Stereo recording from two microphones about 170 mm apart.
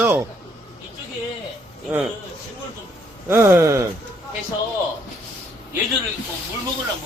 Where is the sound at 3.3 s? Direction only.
15° right (ahead or behind).